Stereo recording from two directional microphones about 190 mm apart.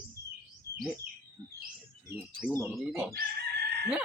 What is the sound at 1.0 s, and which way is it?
Bird, 55° right (ahead or behind).